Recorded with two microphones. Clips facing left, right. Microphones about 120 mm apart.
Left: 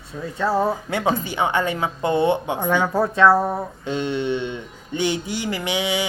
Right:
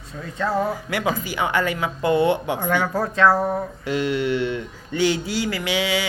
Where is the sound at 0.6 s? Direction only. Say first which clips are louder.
Left 2 dB; 25° left (ahead or behind).